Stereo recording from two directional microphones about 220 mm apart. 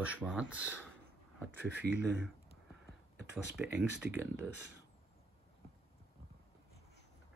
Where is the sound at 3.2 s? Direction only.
5° right (ahead or behind).